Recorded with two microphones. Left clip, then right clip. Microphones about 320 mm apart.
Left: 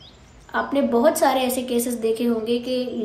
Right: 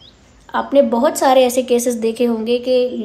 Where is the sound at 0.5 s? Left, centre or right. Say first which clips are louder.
Right 7 dB; right.